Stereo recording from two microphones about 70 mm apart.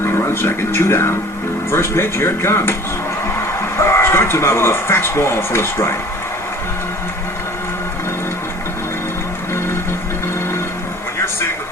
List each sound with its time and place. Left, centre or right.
0.0 s speech: left